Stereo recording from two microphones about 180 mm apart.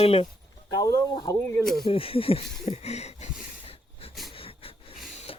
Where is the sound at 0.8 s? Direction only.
20° left (ahead or behind).